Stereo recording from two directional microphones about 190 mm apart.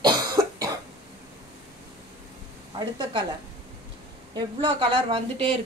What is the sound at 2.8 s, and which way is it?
Speech, 20° right (ahead or behind).